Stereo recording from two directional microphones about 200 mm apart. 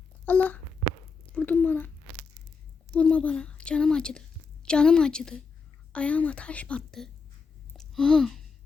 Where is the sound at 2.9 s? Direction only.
5° left (ahead or behind).